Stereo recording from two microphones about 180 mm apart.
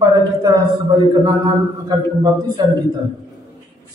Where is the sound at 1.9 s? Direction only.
20° right (ahead or behind).